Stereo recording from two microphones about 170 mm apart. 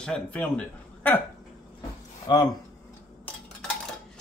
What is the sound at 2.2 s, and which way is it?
Speech, 25° left (ahead or behind).